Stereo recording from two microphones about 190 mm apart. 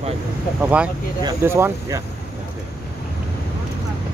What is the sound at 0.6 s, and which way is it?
Speech, 10° right (ahead or behind).